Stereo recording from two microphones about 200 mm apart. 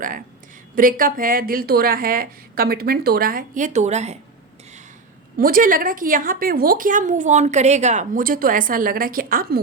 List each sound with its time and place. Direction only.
0.8 s a woman's voice: 45° right (ahead or behind)
5.4 s a woman's voice: 45° right (ahead or behind)